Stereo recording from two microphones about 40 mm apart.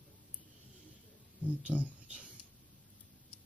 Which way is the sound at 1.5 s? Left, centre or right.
Right.